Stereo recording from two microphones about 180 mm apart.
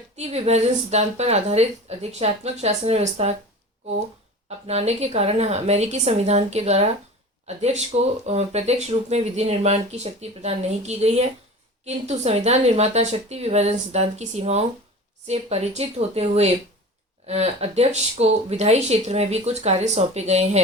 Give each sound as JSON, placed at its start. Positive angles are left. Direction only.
{"t": 0.2, "sound": "speech", "side_deg": -35}
{"t": 4.4, "sound": "speech", "side_deg": -35}